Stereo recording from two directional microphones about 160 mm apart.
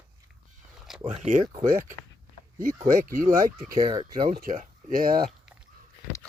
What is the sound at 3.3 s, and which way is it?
Speech, 25° right (ahead or behind).